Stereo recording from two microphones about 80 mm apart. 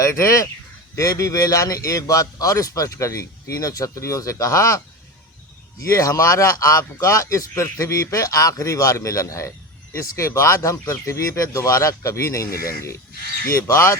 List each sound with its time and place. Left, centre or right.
0.0 s a man's voice: left
5.8 s speech: left